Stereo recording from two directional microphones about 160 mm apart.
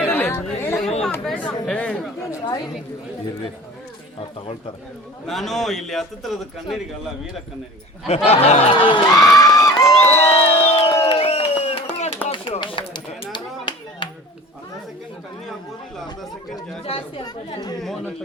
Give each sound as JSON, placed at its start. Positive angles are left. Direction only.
{"t": 0.0, "sound": "chatter", "side_deg": 10}
{"t": 1.0, "sound": "chatter", "side_deg": 5}
{"t": 5.2, "sound": "a man's voice", "side_deg": 0}
{"t": 8.0, "sound": "speech", "side_deg": 40}
{"t": 9.2, "sound": "a sound", "side_deg": 20}
{"t": 10.1, "sound": "crowd", "side_deg": 45}
{"t": 12.3, "sound": "chop", "side_deg": 30}
{"t": 13.3, "sound": "clapping", "side_deg": 30}
{"t": 16.8, "sound": "chatter", "side_deg": 35}
{"t": 17.8, "sound": "a sound", "side_deg": 0}